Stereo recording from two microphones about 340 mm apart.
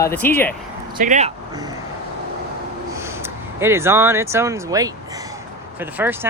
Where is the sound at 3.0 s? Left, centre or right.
Centre.